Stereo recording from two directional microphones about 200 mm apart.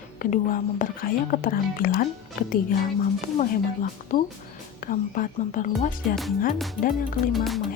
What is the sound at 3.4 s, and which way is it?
Speech, 45° left (ahead or behind).